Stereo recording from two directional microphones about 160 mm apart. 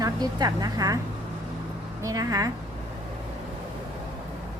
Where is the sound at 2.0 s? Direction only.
20° right (ahead or behind).